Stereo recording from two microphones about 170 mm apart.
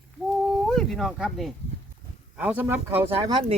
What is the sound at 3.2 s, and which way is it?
Speech, 30° right (ahead or behind).